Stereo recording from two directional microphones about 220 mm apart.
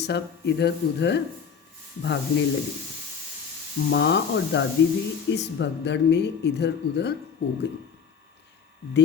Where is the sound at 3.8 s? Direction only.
50° left (ahead or behind).